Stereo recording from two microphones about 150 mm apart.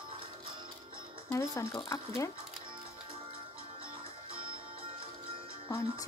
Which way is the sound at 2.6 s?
35° right (ahead or behind).